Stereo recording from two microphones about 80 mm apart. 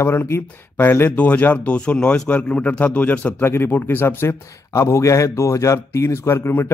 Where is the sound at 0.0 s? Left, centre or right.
Left.